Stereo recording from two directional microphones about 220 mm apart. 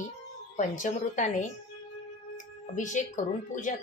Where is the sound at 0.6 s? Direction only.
35° left (ahead or behind).